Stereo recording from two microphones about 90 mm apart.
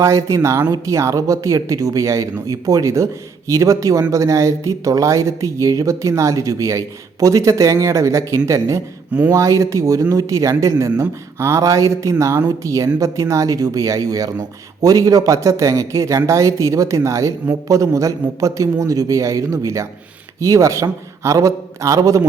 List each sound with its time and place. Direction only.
0.0 s speech: 35° right (ahead or behind)